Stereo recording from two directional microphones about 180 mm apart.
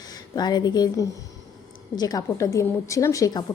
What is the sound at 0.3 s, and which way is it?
A woman's voice, 20° left (ahead or behind).